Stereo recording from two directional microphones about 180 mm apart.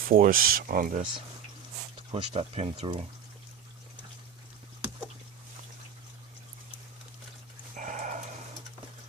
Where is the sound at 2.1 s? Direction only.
35° right (ahead or behind).